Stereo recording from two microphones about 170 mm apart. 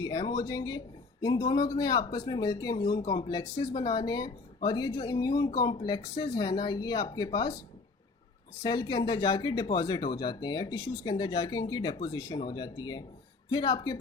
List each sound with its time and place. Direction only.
0.0 s speech: 25° left (ahead or behind)
8.6 s speech: 25° left (ahead or behind)